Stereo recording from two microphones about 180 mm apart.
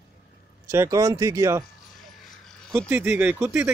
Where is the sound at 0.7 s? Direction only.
20° right (ahead or behind).